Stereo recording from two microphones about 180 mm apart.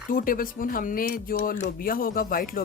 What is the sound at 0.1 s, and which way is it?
Speech, 50° left (ahead or behind).